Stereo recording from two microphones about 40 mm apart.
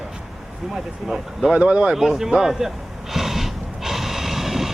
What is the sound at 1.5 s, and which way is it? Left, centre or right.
Speech, right.